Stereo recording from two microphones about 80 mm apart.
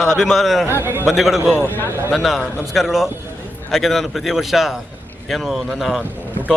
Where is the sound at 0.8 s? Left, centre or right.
Right.